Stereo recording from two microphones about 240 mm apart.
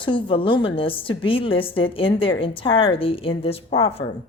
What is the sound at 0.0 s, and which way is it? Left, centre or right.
Speech, left.